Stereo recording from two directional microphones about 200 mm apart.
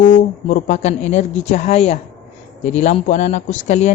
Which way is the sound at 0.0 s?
40° left (ahead or behind).